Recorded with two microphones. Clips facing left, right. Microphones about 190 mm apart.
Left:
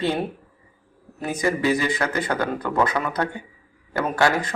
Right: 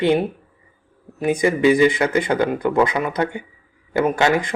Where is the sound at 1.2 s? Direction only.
20° right (ahead or behind).